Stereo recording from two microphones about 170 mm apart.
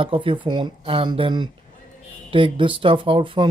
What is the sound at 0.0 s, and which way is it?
A man's voice, 30° right (ahead or behind).